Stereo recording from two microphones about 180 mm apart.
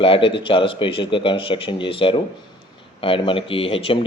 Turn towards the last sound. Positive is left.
turn(degrees=30)  # may be behind; listen again after turning